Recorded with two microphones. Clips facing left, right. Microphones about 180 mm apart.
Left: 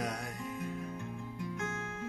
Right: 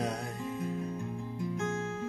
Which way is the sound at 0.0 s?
30° right (ahead or behind).